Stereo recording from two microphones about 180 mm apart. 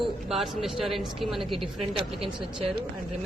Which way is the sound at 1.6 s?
30° right (ahead or behind).